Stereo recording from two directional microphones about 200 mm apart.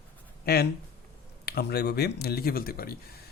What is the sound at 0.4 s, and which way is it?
A man's voice, 50° left (ahead or behind).